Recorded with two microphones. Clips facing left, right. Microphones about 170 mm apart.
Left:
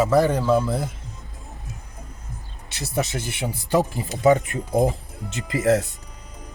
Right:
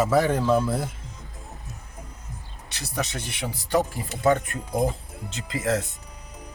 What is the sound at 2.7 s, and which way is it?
Speech, 25° left (ahead or behind).